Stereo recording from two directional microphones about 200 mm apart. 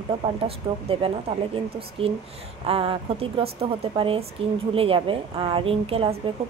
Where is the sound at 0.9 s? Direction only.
25° right (ahead or behind).